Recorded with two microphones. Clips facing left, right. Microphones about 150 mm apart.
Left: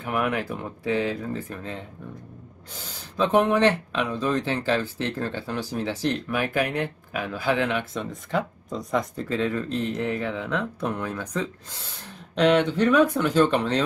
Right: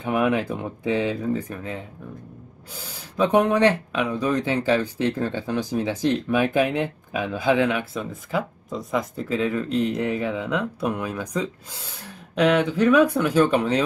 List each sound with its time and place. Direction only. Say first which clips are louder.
0.0 s speech: right 4 dB; 20° right (ahead or behind)
7.9 s speech: right 1 dB; 5° right (ahead or behind)